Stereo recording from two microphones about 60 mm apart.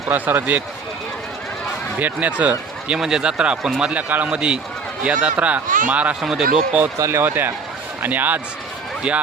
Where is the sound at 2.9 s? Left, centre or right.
Centre.